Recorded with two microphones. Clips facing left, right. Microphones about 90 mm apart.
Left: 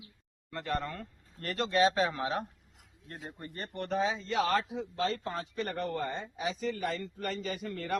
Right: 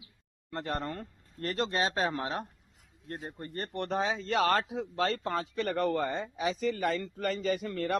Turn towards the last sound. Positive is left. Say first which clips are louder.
# right 5 dB
turn(degrees=-65)  # may be behind; listen again after turning